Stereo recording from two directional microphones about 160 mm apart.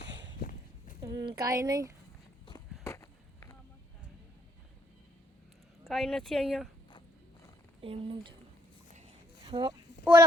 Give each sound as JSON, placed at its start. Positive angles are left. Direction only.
{"t": 1.0, "sound": "speech", "side_deg": -25}
{"t": 2.8, "sound": "skateboard", "side_deg": 20}
{"t": 5.8, "sound": "speech", "side_deg": 5}
{"t": 7.8, "sound": "speech", "side_deg": -35}
{"t": 9.4, "sound": "a sound", "side_deg": -25}
{"t": 10.0, "sound": "speech", "side_deg": -15}